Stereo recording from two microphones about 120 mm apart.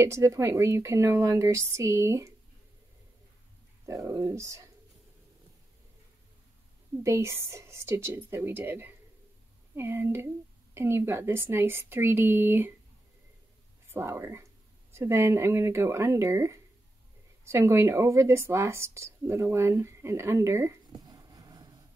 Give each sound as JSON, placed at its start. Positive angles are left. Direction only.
{"t": 0.0, "sound": "speech", "side_deg": -25}
{"t": 3.8, "sound": "speech", "side_deg": -25}
{"t": 7.0, "sound": "speech", "side_deg": -25}
{"t": 13.8, "sound": "speech", "side_deg": -20}
{"t": 21.0, "sound": "a sound", "side_deg": -35}